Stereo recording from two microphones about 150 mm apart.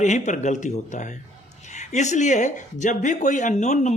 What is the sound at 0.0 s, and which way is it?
Speech, 55° left (ahead or behind).